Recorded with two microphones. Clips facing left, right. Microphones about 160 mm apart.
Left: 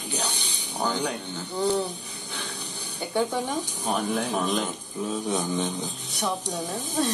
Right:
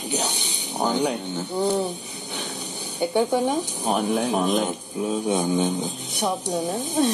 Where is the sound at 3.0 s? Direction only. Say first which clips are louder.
Right 5 dB; 15° right (ahead or behind).